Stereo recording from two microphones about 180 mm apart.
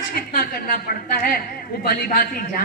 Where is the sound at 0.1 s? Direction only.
55° left (ahead or behind).